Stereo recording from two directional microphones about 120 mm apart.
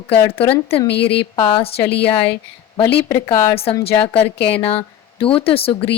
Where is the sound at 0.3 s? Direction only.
55° left (ahead or behind).